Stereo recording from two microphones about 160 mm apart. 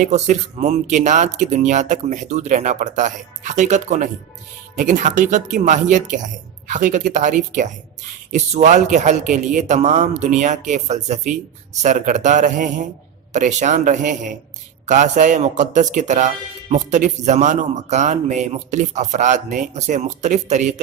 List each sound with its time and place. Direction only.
0.0 s speech: 50° right (ahead or behind)